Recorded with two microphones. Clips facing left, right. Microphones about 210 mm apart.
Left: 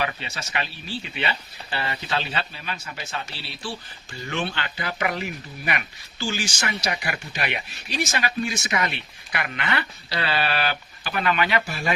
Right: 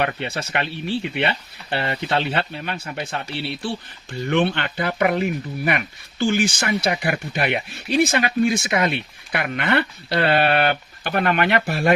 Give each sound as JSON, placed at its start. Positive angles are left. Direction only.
{"t": 0.0, "sound": "speech", "side_deg": -60}